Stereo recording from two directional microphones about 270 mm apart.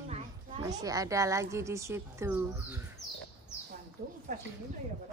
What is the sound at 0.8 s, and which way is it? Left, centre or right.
Speech, centre.